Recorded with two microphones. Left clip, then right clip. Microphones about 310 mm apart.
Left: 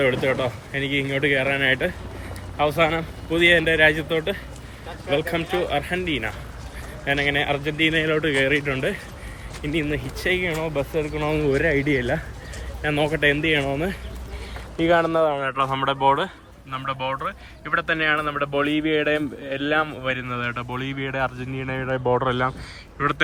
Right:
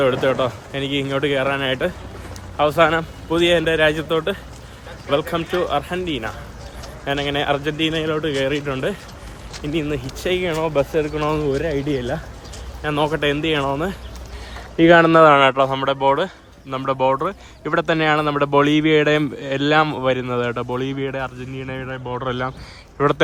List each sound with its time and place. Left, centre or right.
0.0 s speech: centre
14.8 s speech: right
15.5 s speech: centre
20.1 s speech: centre